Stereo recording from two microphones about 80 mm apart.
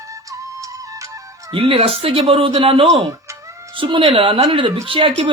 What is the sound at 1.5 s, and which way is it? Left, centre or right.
Speech, right.